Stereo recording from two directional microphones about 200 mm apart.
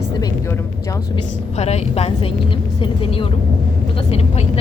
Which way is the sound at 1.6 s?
30° left (ahead or behind).